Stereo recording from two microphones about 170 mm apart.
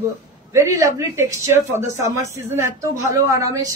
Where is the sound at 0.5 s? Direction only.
15° right (ahead or behind).